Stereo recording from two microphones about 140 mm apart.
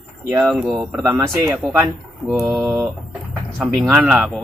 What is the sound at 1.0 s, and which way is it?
Speech, 20° right (ahead or behind).